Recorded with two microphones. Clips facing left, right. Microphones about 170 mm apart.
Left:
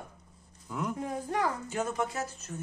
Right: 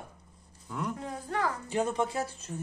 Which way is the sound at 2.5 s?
20° right (ahead or behind).